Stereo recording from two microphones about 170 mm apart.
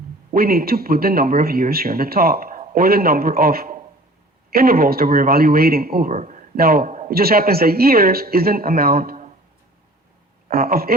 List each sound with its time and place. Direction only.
0.3 s speech: 60° right (ahead or behind)
6.1 s speech: 45° right (ahead or behind)
6.6 s speech: 60° right (ahead or behind)
10.5 s speech: 60° right (ahead or behind)